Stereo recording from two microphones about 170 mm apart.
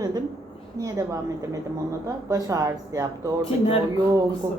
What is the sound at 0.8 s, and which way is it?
Speech, 20° right (ahead or behind).